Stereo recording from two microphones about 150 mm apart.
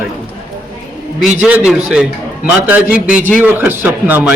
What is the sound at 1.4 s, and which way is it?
A man's voice, 10° right (ahead or behind).